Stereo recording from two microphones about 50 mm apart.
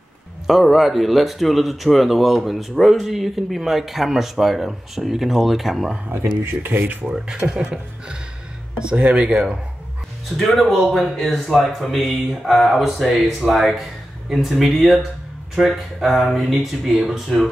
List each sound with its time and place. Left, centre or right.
0.5 s speech: centre
6.5 s speech: right
7.2 s speech: centre
10.3 s speech: centre